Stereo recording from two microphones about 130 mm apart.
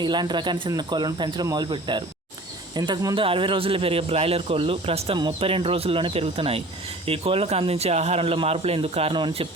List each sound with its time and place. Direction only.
0.0 s speech: 35° right (ahead or behind)
3.2 s a man's voice: 40° right (ahead or behind)